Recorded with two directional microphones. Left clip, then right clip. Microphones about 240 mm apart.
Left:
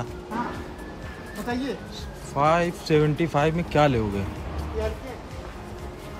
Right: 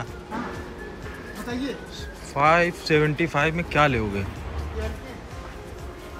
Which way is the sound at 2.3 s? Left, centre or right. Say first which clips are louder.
Right 2 dB; centre.